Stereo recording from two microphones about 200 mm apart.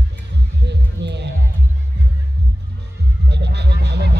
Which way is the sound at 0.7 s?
60° right (ahead or behind).